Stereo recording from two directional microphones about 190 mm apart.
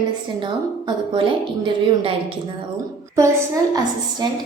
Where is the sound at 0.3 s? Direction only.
25° right (ahead or behind).